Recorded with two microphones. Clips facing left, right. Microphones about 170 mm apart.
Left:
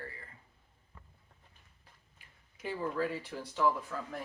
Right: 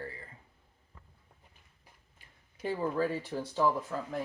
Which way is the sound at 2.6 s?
30° right (ahead or behind).